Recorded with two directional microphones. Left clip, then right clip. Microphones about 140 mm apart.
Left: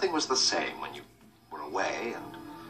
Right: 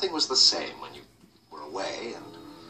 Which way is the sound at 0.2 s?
15° right (ahead or behind).